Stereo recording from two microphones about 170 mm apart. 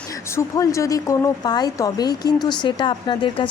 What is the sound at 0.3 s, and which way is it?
A woman's voice, 20° left (ahead or behind).